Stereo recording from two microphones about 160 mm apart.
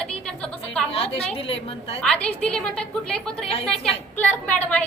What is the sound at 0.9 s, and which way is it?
A woman's voice, 35° left (ahead or behind).